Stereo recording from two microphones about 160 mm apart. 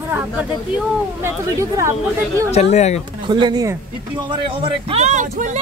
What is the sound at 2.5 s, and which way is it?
Speech, 45° left (ahead or behind).